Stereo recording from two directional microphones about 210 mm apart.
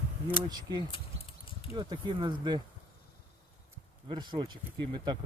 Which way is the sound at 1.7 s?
20° right (ahead or behind).